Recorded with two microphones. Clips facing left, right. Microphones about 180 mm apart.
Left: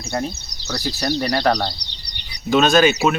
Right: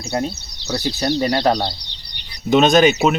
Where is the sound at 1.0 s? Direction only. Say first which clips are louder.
Right 2 dB; 25° right (ahead or behind).